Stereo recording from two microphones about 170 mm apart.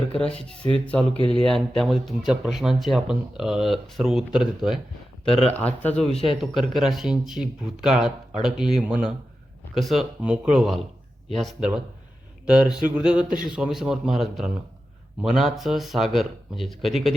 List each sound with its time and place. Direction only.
0.7 s speech: 10° left (ahead or behind)
5.3 s speech: 35° left (ahead or behind)
5.5 s speech: 10° left (ahead or behind)
6.1 s speech: 35° left (ahead or behind)
6.4 s speech: centre (ahead or behind)